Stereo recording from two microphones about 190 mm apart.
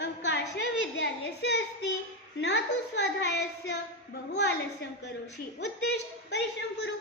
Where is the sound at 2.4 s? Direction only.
70° left (ahead or behind).